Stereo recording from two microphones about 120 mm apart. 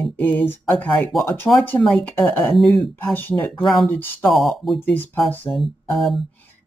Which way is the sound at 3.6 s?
Centre (ahead or behind).